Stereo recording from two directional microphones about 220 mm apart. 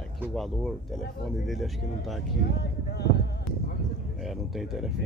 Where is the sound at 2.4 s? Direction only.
45° left (ahead or behind).